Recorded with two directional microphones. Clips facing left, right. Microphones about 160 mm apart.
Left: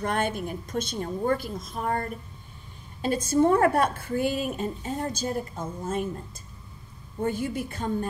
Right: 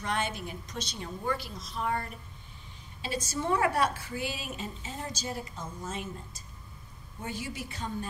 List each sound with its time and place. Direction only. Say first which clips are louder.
0.0 s speech: left 6 dB; 50° left (ahead or behind)